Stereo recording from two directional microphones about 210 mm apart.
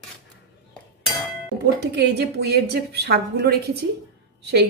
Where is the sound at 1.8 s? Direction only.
50° right (ahead or behind).